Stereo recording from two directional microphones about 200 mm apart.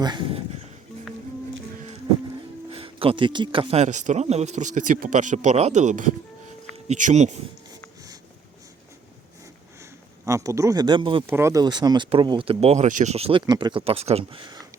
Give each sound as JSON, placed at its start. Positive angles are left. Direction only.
{"t": 0.0, "sound": "speech", "side_deg": -25}
{"t": 2.6, "sound": "speech", "side_deg": -25}
{"t": 10.2, "sound": "speech", "side_deg": -15}
{"t": 11.3, "sound": "speech", "side_deg": -15}